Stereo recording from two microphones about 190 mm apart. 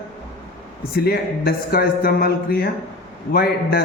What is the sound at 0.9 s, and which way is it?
A man's voice, 55° left (ahead or behind).